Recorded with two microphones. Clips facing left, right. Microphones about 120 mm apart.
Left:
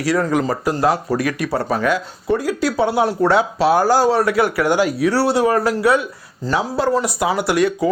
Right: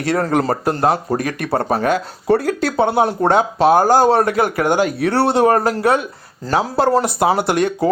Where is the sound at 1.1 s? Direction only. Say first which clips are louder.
Even; 45° right (ahead or behind).